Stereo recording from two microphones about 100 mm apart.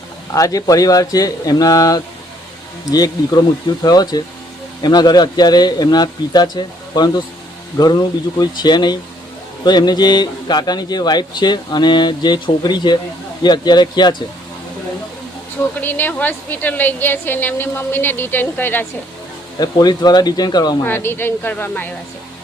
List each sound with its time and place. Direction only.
0.3 s a man's voice: 35° left (ahead or behind)
15.8 s a woman's voice: 20° left (ahead or behind)
19.5 s a man's voice: 45° left (ahead or behind)
20.8 s a woman's voice: 20° left (ahead or behind)